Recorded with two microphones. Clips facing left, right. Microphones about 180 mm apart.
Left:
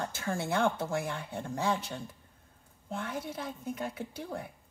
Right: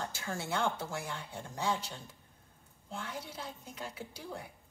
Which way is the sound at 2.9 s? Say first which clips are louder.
Left 6 dB; 55° left (ahead or behind).